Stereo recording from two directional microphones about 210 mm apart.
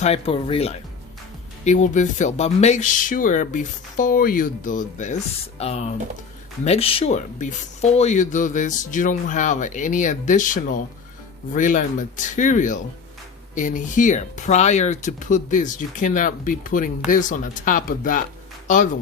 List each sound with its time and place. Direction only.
0.0 s speech: 30° left (ahead or behind)